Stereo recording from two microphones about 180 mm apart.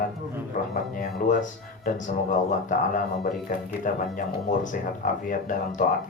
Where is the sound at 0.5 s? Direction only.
50° left (ahead or behind).